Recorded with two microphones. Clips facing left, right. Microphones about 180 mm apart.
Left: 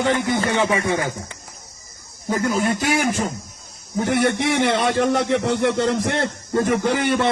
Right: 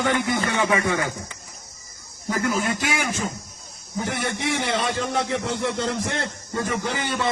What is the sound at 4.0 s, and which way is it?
A man's voice, 65° left (ahead or behind).